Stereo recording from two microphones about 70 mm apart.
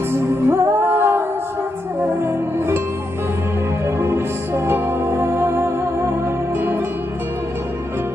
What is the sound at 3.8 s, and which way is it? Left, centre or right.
Music, right.